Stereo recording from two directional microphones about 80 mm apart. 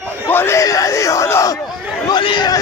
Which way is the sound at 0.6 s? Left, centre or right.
Left.